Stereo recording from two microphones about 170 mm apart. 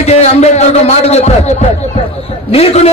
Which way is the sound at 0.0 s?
40° left (ahead or behind).